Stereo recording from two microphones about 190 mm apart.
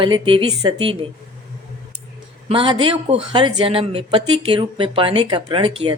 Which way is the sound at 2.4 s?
30° right (ahead or behind).